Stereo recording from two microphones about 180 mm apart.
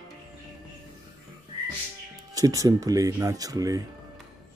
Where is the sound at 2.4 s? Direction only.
20° right (ahead or behind).